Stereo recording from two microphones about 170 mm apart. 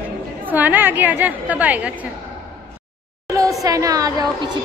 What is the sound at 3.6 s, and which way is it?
Speech, 20° right (ahead or behind).